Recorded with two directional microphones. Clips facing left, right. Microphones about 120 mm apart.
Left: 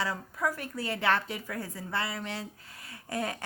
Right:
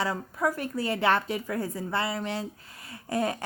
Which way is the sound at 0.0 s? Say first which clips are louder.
Right 4 dB; 30° right (ahead or behind).